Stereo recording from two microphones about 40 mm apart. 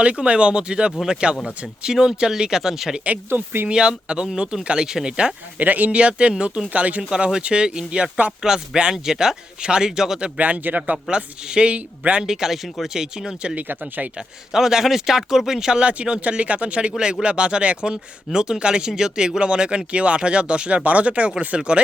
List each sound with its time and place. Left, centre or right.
0.0 s speech: right; by 2.9 s centre
3.2 s speech: right
3.7 s speech: right
5.5 s speech: right
5.9 s speech: right
7.1 s speech: right
10.4 s speech: right
10.9 s speech: right
12.2 s speech: centre
13.7 s speech: right
14.5 s speech: centre
15.8 s speech: right